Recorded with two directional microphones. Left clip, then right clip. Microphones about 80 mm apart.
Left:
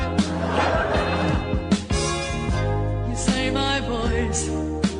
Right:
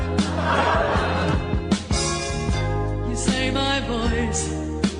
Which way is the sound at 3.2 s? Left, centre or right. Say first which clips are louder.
Even; right.